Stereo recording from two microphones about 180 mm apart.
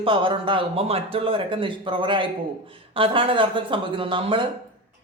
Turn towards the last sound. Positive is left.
turn(degrees=-30)  # may be behind; listen again after turning